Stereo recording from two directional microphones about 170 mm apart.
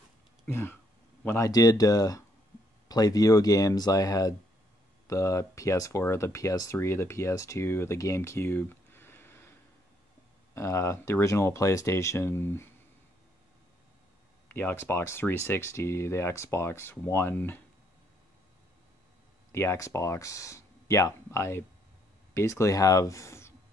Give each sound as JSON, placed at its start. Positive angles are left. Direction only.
{"t": 0.5, "sound": "speech", "side_deg": 15}
{"t": 10.5, "sound": "speech", "side_deg": 15}
{"t": 14.5, "sound": "speech", "side_deg": 10}
{"t": 19.5, "sound": "speech", "side_deg": 15}